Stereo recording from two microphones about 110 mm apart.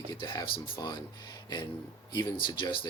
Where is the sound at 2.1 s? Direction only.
45° left (ahead or behind).